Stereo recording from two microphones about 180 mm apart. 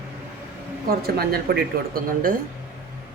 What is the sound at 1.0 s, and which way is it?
Speech, 60° right (ahead or behind).